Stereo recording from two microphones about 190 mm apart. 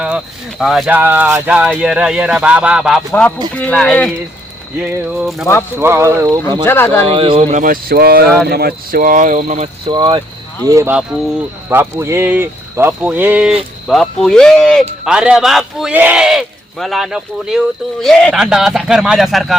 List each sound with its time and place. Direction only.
0.6 s speech: centre (ahead or behind)
5.7 s speech: 10° right (ahead or behind)
6.7 s speech: 15° left (ahead or behind)
7.1 s speech: 30° right (ahead or behind)
9.9 s speech: 25° right (ahead or behind)
10.7 s speech: 15° right (ahead or behind)